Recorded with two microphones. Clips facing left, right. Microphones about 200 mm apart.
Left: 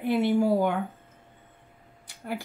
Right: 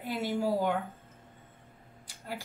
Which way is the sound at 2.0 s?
60° left (ahead or behind).